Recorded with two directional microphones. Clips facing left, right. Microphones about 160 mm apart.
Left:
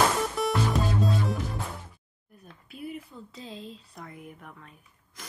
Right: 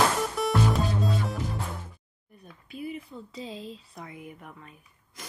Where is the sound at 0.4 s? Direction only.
Centre (ahead or behind).